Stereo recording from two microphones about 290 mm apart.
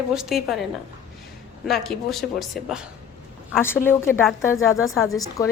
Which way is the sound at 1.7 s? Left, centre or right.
Centre.